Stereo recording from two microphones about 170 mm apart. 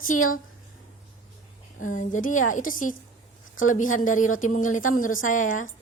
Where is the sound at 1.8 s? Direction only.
50° left (ahead or behind).